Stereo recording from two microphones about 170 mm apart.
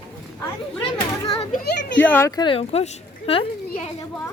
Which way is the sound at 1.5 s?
60° left (ahead or behind).